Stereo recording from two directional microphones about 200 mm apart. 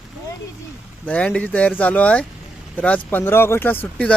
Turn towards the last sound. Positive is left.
turn(degrees=10)  # may be behind; listen again after turning